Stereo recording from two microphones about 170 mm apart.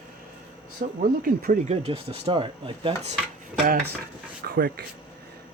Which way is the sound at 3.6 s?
60° right (ahead or behind).